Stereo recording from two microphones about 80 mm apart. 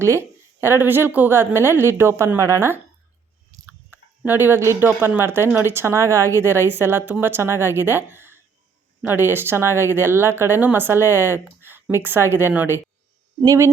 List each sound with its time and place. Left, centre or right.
0.0 s a woman's voice: right
4.3 s a woman's voice: right